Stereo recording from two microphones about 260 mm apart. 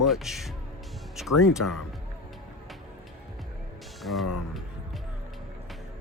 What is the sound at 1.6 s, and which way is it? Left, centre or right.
Speech, left.